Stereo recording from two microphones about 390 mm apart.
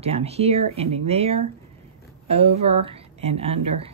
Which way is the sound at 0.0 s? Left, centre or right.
Centre.